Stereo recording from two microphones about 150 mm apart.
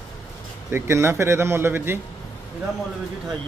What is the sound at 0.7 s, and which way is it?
Speech, 15° right (ahead or behind).